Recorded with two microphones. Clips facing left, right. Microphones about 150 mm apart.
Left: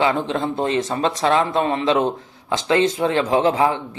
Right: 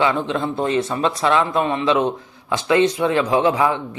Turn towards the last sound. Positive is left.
turn(degrees=30)  # may be behind; listen again after turning